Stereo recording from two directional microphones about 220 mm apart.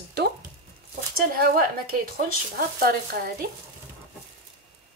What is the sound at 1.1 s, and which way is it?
Speech, 40° right (ahead or behind).